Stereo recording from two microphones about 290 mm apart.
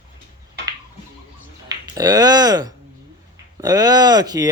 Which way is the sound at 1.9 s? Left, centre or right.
Centre.